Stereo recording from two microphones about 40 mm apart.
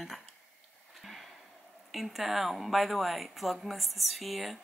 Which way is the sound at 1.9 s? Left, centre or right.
Centre.